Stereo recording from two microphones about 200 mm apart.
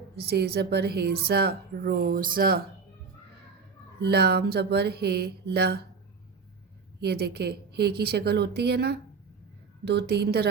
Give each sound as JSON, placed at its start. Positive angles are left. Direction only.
{"t": 0.2, "sound": "speech", "side_deg": -55}
{"t": 4.0, "sound": "speech", "side_deg": -55}
{"t": 7.0, "sound": "a woman's voice", "side_deg": -55}